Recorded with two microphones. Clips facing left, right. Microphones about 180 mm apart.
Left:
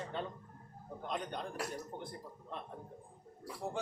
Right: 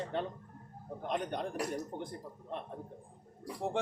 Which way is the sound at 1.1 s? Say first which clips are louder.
Right 5 dB; 60° right (ahead or behind).